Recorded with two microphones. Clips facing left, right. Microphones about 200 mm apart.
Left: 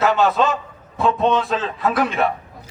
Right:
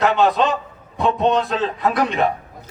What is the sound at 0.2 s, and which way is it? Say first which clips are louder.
A man's voice: right 1 dB; centre (ahead or behind).